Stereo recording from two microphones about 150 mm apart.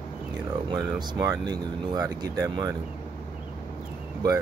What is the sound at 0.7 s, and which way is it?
Speech, 30° right (ahead or behind).